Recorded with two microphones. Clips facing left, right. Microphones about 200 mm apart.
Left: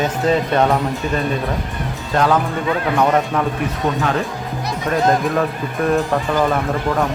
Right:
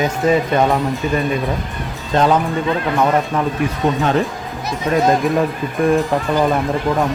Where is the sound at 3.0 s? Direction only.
Centre (ahead or behind).